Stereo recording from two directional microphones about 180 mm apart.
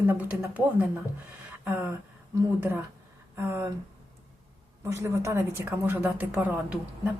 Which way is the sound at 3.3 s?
15° right (ahead or behind).